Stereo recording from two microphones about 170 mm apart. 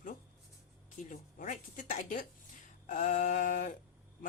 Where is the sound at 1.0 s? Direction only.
50° left (ahead or behind).